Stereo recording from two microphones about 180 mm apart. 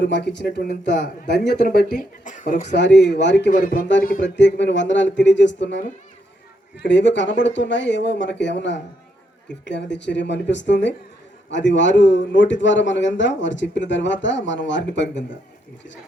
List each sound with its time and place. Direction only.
0.0 s speech: 70° left (ahead or behind); by 1.9 s 55° left (ahead or behind)
2.0 s speech: 45° left (ahead or behind)
2.7 s speech: 75° left (ahead or behind)
3.5 s speech: 50° left (ahead or behind)
4.2 s a man's voice: 80° left